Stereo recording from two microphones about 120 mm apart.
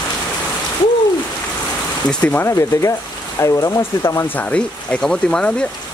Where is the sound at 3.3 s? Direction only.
25° left (ahead or behind).